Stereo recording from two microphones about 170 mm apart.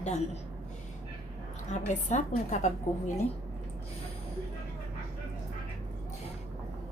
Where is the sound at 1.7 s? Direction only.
45° left (ahead or behind).